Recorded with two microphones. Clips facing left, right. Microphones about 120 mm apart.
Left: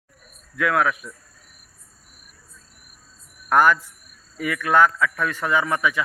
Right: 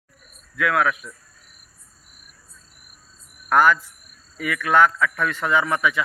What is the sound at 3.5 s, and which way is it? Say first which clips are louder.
Speech: even; 15° left (ahead or behind).